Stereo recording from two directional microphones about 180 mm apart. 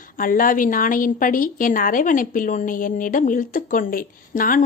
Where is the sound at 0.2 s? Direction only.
50° left (ahead or behind).